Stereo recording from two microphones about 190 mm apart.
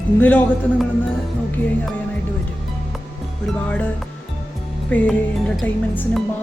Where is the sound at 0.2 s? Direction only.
5° left (ahead or behind).